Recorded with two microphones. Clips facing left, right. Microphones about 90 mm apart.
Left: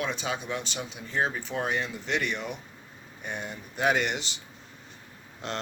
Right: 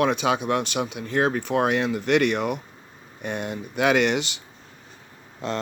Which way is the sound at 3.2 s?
80° right.